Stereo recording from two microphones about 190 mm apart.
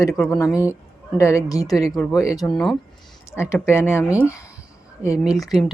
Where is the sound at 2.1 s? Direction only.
15° left (ahead or behind).